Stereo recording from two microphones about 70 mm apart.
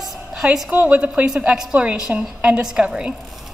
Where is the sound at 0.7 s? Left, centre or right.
Centre.